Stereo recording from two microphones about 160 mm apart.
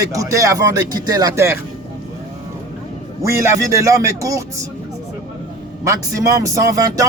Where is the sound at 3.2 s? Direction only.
15° right (ahead or behind).